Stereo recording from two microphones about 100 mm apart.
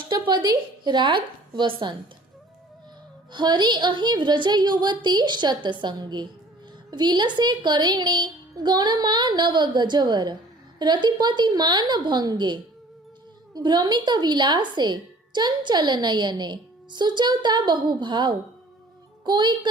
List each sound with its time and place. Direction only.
0.1 s a woman's voice: 45° right (ahead or behind)
3.3 s a woman's voice: 50° right (ahead or behind)